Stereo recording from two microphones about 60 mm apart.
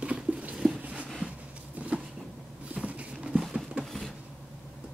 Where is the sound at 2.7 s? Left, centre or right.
Right.